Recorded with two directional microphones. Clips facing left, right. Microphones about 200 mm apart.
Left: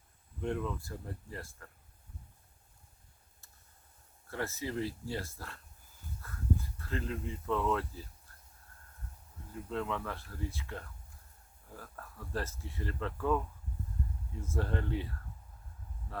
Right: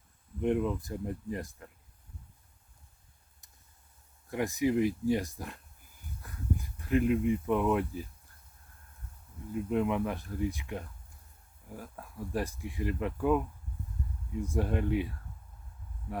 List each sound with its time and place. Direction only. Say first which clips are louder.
0.3 s speech: right 7 dB; 20° right (ahead or behind)
4.3 s speech: right 9 dB; 15° right (ahead or behind)
9.5 s speech: right 7 dB; 15° right (ahead or behind)